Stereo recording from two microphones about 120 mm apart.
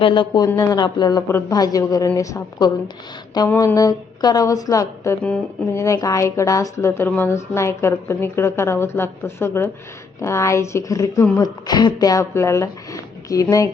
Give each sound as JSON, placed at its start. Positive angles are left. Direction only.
{"t": 0.0, "sound": "speech", "side_deg": 45}
{"t": 0.4, "sound": "a woman's voice", "side_deg": 30}
{"t": 3.5, "sound": "speech", "side_deg": 20}
{"t": 3.8, "sound": "a woman's voice", "side_deg": 30}